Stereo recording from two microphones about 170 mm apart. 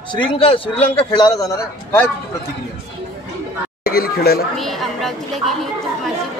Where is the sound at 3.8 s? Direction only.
60° left (ahead or behind).